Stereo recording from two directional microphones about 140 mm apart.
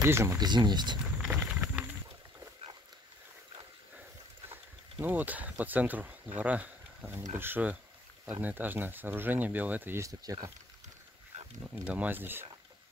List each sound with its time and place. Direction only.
0.0 s speech: 20° right (ahead or behind)
0.4 s speech: 30° right (ahead or behind)
1.1 s a sound: 10° right (ahead or behind)
4.9 s speech: 10° right (ahead or behind)
11.3 s a sound: 50° right (ahead or behind)
11.8 s speech: 10° right (ahead or behind)